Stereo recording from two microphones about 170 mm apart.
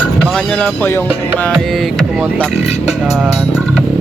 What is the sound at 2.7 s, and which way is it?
Music, 40° left (ahead or behind).